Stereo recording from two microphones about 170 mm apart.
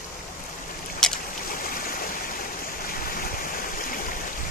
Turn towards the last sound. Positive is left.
turn(degrees=55)  # may be behind; listen again after turning